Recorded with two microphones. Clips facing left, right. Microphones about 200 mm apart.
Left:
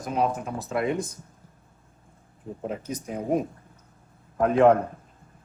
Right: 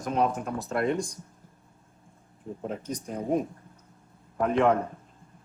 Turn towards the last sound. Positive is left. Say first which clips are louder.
# left 5 dB
turn(degrees=5)  # may be behind; listen again after turning